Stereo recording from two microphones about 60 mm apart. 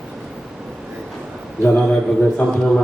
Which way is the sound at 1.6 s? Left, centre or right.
Centre.